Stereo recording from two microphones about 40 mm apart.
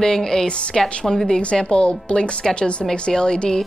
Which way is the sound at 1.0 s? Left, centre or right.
Centre.